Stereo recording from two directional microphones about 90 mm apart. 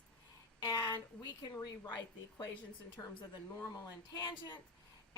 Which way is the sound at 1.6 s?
50° left (ahead or behind).